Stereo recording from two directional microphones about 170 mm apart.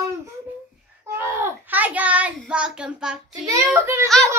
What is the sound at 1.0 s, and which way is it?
A child's voice, 15° right (ahead or behind).